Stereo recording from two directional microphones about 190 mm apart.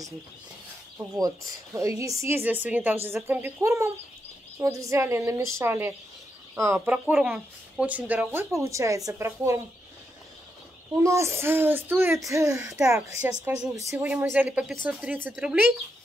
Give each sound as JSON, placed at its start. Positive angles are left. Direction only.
{"t": 1.1, "sound": "speech", "side_deg": -20}
{"t": 7.1, "sound": "speech", "side_deg": -5}
{"t": 11.0, "sound": "speech", "side_deg": -15}